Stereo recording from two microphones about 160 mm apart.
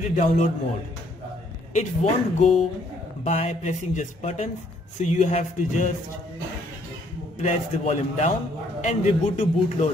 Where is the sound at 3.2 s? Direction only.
40° left (ahead or behind).